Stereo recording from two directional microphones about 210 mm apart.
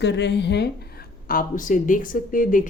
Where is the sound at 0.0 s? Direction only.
55° left (ahead or behind).